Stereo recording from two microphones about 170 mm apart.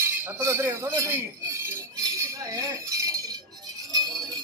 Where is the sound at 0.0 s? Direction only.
10° right (ahead or behind).